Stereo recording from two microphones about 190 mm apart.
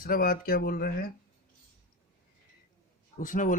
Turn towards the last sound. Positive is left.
turn(degrees=45)  # may be behind; listen again after turning